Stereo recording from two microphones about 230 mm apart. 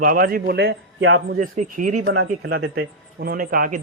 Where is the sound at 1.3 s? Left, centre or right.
Right.